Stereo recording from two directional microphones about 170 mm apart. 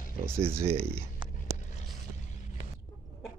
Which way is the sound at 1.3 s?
45° left (ahead or behind).